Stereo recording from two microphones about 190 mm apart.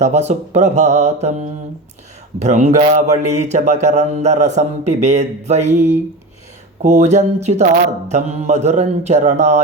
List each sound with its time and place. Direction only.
0.0 s speech: 35° right (ahead or behind)
6.8 s speech: 35° right (ahead or behind)